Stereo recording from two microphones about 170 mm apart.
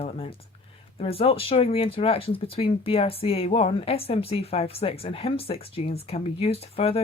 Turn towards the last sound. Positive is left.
turn(degrees=35)  # may be behind; listen again after turning